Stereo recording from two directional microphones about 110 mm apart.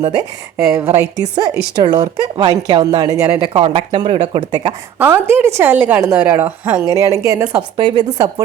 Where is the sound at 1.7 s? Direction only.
40° right (ahead or behind).